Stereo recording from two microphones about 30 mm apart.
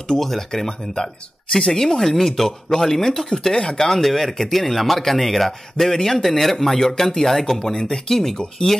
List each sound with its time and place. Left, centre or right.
0.2 s speech: centre
0.5 s a man's voice: centre